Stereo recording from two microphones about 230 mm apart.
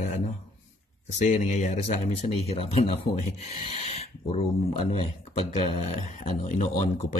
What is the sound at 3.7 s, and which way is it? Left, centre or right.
Pig, left.